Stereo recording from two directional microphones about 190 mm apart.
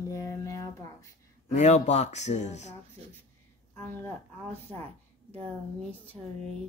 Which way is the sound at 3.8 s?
10° left (ahead or behind).